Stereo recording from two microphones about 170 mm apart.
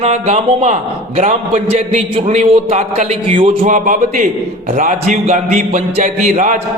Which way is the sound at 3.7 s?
50° right (ahead or behind).